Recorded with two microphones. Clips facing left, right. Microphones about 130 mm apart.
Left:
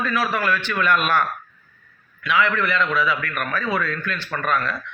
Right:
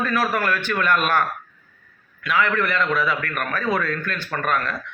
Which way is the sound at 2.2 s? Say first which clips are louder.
Even; 45° right (ahead or behind).